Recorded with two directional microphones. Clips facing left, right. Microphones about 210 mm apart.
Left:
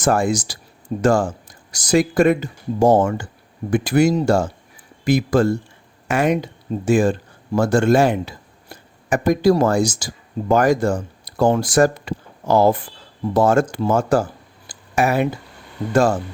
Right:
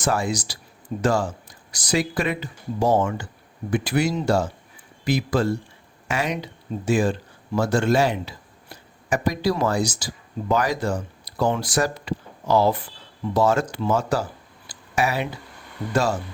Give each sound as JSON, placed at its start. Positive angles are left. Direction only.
{"t": 0.0, "sound": "speech", "side_deg": 50}
{"t": 14.7, "sound": "a sound", "side_deg": 50}
{"t": 15.9, "sound": "speech", "side_deg": 50}